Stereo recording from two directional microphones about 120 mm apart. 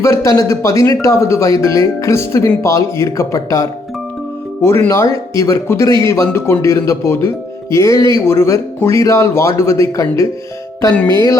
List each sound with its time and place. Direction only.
0.0 s speech: 25° left (ahead or behind)